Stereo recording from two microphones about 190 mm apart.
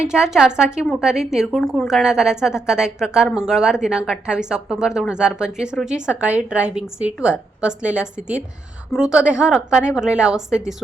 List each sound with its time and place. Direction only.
0.0 s speech: 5° right (ahead or behind)